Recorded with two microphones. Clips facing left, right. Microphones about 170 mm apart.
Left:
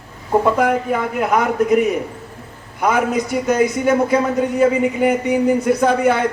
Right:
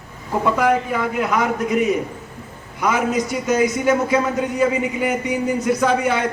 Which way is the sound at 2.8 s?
55° left (ahead or behind).